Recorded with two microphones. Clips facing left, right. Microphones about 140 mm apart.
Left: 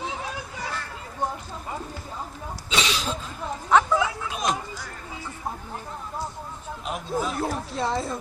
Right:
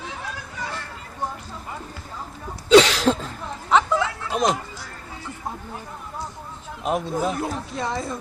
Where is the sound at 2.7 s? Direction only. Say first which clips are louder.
Right 14 dB; 80° right.